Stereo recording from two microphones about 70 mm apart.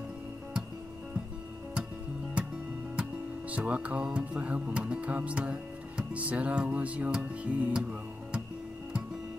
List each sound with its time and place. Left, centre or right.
3.0 s music: centre